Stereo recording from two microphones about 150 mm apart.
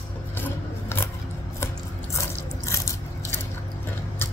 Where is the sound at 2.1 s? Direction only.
20° left (ahead or behind).